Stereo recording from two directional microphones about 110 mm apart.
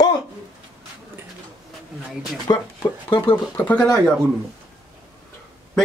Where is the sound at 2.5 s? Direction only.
35° left (ahead or behind).